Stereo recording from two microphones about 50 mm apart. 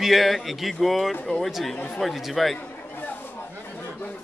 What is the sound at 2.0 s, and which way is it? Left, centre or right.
Speech, centre.